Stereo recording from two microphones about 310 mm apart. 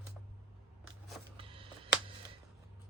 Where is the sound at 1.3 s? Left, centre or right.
Centre.